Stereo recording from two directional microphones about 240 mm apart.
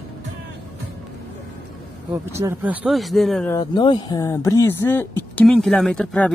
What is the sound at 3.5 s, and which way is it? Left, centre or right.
Speech, centre.